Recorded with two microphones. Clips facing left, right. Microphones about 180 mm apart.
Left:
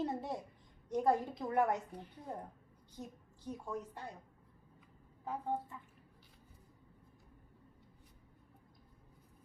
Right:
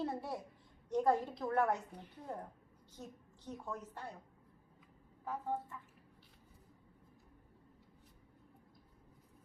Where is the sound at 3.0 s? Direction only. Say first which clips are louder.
Left 2 dB; 10° left (ahead or behind).